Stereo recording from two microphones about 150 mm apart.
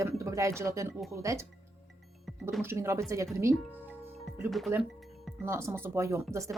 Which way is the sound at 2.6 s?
15° right (ahead or behind).